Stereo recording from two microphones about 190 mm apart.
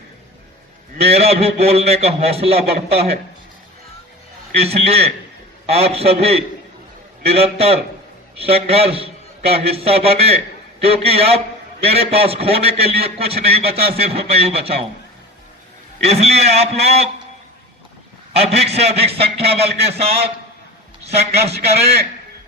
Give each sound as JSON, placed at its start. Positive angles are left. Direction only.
{"t": 0.9, "sound": "a man's voice", "side_deg": -35}
{"t": 4.5, "sound": "a man's voice", "side_deg": -35}
{"t": 16.0, "sound": "a man's voice", "side_deg": -35}
{"t": 18.5, "sound": "a man's voice", "side_deg": -35}